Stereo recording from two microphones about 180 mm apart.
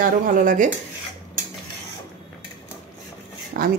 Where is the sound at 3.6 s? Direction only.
50° right (ahead or behind).